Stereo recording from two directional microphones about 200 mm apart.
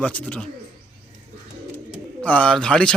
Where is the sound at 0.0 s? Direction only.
5° left (ahead or behind).